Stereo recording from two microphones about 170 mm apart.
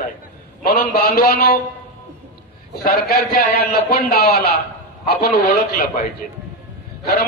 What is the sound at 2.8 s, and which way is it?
A man's voice, 60° left (ahead or behind).